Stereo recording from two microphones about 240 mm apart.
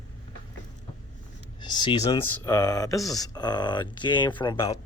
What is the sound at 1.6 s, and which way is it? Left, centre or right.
Speech, centre.